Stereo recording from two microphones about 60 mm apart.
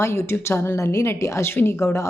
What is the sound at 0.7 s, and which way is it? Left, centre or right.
A woman's voice, left.